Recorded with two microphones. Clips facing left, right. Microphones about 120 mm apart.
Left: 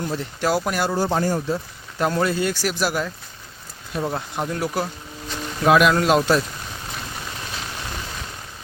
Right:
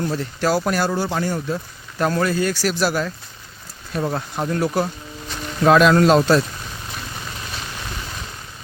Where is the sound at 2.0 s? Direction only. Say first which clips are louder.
Right 1 dB; 20° left (ahead or behind).